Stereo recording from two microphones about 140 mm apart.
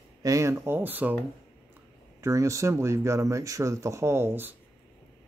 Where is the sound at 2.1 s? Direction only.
20° right (ahead or behind).